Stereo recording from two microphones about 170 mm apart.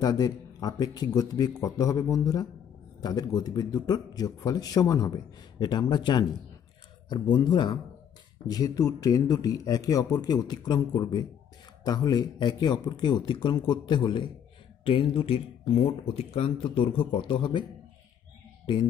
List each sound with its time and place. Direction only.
0.0 s a man's voice: 20° left (ahead or behind)